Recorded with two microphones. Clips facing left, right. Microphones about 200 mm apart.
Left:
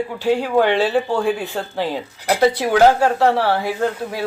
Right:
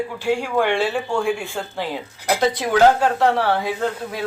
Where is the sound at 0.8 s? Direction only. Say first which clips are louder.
Left 3 dB; 35° left (ahead or behind).